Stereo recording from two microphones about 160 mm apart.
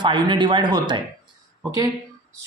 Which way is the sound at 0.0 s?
30° right (ahead or behind).